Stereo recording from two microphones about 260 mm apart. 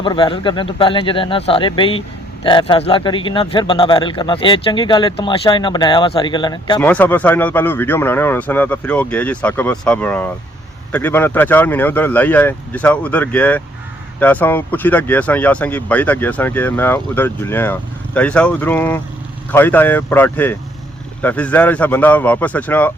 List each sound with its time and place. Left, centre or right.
0.0 s speech: centre